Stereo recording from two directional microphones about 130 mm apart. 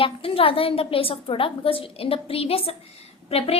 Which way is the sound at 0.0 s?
45° left (ahead or behind).